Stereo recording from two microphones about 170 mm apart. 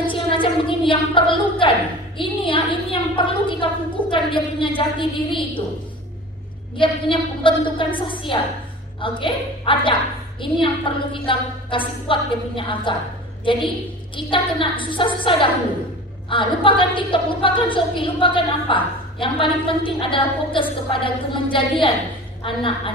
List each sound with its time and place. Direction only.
0.0 s a sound: 30° left (ahead or behind)
2.1 s a woman's voice: 30° left (ahead or behind)
6.8 s a woman's voice: 30° left (ahead or behind)